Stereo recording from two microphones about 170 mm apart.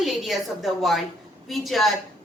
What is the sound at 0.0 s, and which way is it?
Speech, centre (ahead or behind).